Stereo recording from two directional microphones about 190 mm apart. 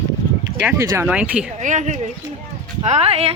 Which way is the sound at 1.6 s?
40° right (ahead or behind).